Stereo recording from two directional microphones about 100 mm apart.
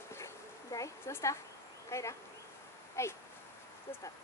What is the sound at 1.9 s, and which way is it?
Speech, 30° left (ahead or behind).